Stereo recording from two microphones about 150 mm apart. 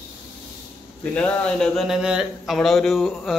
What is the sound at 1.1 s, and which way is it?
A man's voice, 10° left (ahead or behind).